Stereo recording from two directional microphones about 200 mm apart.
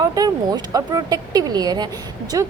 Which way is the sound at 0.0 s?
20° right (ahead or behind).